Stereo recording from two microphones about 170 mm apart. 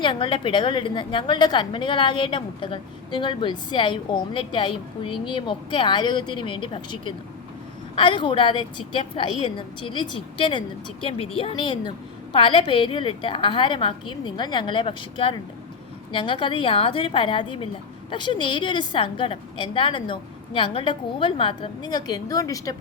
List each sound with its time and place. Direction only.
0.0 s a woman's voice: 30° left (ahead or behind)